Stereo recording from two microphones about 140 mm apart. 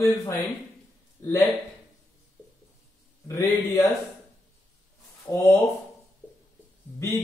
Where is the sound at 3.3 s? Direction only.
20° left (ahead or behind).